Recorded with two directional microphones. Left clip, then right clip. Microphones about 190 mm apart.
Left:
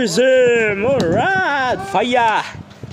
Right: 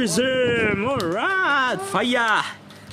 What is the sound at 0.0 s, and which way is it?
Speech, 20° right (ahead or behind).